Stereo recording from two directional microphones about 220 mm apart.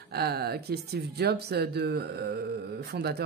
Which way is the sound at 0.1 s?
45° right (ahead or behind).